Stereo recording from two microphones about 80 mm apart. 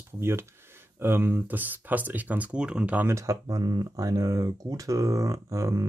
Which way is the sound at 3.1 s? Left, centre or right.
Right.